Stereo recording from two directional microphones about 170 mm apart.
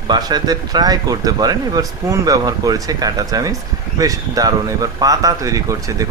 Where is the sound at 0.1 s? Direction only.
25° right (ahead or behind).